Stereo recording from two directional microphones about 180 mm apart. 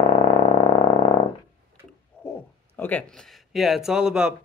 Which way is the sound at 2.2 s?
5° left (ahead or behind).